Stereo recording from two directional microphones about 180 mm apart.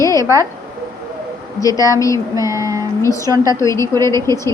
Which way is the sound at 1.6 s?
20° left (ahead or behind).